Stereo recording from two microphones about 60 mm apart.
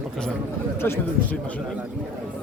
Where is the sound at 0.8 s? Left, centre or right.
Left.